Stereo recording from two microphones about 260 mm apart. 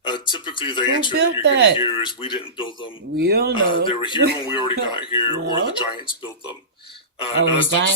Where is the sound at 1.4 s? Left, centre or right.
Right.